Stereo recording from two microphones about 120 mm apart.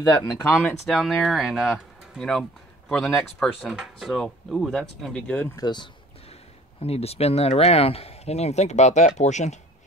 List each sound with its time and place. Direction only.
0.0 s speech: 30° left (ahead or behind)
0.8 s speech: centre (ahead or behind)
5.6 s speech: 35° left (ahead or behind)
6.8 s speech: 60° left (ahead or behind); by 9.6 s 75° left (ahead or behind)